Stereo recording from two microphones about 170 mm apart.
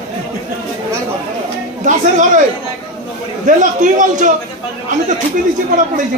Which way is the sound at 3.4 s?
50° right (ahead or behind).